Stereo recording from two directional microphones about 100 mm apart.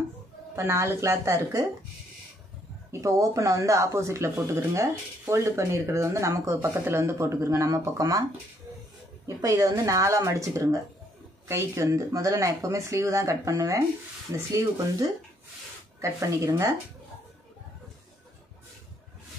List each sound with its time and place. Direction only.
0.6 s speech: 25° right (ahead or behind)
2.9 s speech: 30° right (ahead or behind)
9.4 s speech: 35° right (ahead or behind)